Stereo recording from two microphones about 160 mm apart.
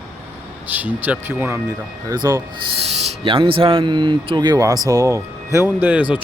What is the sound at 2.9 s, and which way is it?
Speech, 40° right (ahead or behind).